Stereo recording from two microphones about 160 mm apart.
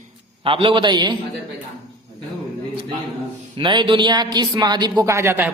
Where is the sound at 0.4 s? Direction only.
30° right (ahead or behind).